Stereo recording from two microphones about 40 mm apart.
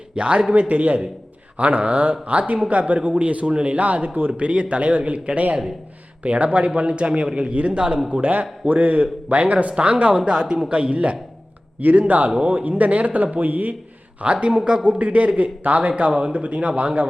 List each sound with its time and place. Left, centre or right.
0.2 s a man's voice: right
8.1 s a man's voice: right
10.2 s a man's voice: centre
10.9 s a man's voice: right
14.2 s a man's voice: right